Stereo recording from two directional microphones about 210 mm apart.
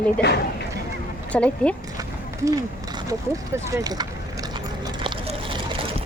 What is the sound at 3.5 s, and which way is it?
Speech, 15° right (ahead or behind).